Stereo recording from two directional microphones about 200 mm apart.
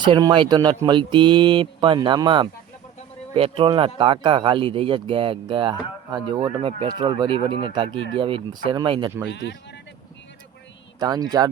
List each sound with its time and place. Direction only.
0.0 s speech: 20° right (ahead or behind)
9.2 s speech: 60° left (ahead or behind)
11.0 s speech: 20° right (ahead or behind)